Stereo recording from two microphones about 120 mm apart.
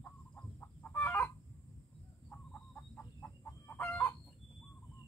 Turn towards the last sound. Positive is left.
turn(degrees=10)  # may be behind; listen again after turning